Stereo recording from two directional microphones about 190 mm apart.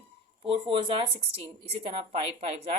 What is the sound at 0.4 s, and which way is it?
A woman's voice, 30° right (ahead or behind).